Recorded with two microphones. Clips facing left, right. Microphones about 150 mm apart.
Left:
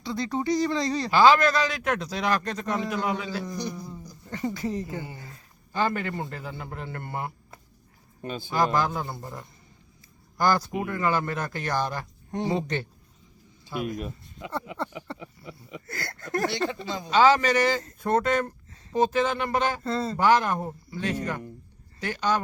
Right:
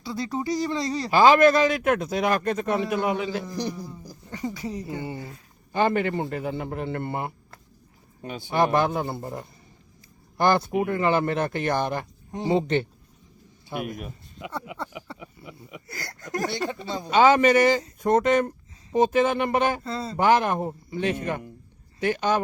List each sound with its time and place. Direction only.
0.0 s speech: 5° right (ahead or behind)
0.7 s a man's voice: 20° right (ahead or behind)
1.4 s speech: 50° right (ahead or behind)
2.6 s speech: 15° right (ahead or behind)
4.3 s a man's voice: 15° right (ahead or behind)
13.7 s speech: 60° right (ahead or behind)
14.8 s a sound: 5° right (ahead or behind)
15.4 s a man's voice: 15° right (ahead or behind)
19.8 s a sound: centre (ahead or behind)
20.1 s a man's voice: 20° right (ahead or behind)